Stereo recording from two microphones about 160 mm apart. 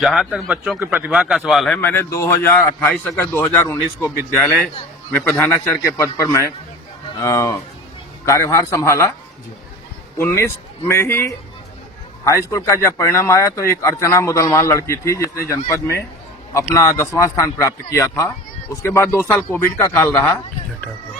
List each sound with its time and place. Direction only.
0.0 s speech: centre (ahead or behind)
1.8 s speech: 10° left (ahead or behind)
10.2 s a man's voice: 15° left (ahead or behind)